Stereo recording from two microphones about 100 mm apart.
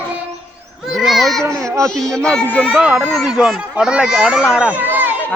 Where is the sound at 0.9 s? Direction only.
Centre (ahead or behind).